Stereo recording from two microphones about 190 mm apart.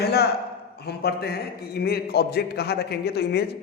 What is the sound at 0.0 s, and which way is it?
A man's voice, 55° left (ahead or behind).